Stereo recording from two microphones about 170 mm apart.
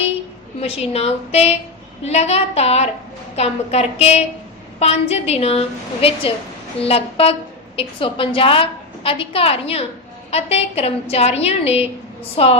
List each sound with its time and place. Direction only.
0.6 s a woman's voice: 35° left (ahead or behind)